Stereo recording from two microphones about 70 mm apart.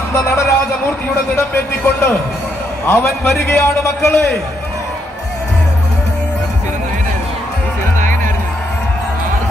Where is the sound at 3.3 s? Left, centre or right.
Left.